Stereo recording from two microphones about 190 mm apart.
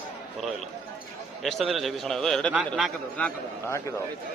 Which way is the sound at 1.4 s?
Centre (ahead or behind).